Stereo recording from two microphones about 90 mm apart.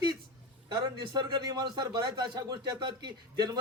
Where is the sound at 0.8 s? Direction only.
50° right (ahead or behind).